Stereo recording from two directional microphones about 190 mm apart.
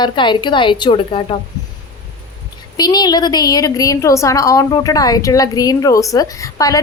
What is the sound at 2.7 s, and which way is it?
A woman's voice, 20° left (ahead or behind).